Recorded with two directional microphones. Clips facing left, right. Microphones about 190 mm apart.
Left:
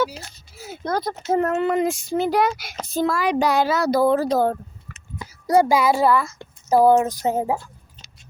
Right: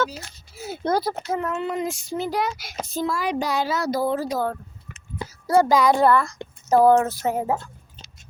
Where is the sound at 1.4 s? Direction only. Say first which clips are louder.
Left 6 dB; 50° left (ahead or behind).